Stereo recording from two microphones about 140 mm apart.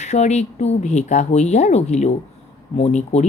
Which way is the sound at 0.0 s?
55° left (ahead or behind).